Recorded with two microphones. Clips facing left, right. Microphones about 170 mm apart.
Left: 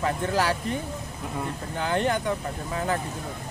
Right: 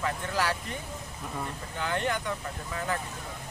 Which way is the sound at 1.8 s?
35° left (ahead or behind).